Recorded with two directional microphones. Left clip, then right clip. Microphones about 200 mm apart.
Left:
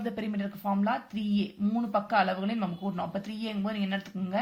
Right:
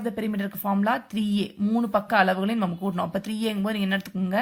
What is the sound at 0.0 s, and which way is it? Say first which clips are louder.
Speech: right 5 dB; 35° right (ahead or behind).